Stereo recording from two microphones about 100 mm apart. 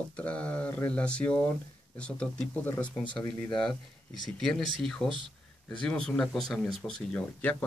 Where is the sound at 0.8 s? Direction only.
10° left (ahead or behind).